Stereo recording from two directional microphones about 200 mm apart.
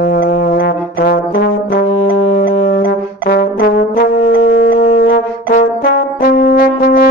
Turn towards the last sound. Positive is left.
turn(degrees=50)  # may be behind; listen again after turning